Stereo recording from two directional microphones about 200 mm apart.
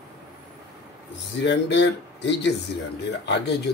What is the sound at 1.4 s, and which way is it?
Speech, 65° left (ahead or behind).